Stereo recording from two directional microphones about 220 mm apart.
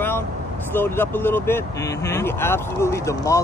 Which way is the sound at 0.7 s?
10° left (ahead or behind).